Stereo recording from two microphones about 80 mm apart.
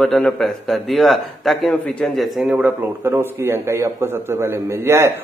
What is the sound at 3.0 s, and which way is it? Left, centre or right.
A man's voice, right.